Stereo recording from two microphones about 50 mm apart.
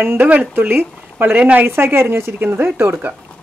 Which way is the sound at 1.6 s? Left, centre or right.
Right.